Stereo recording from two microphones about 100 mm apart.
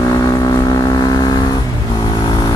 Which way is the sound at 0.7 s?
45° left (ahead or behind).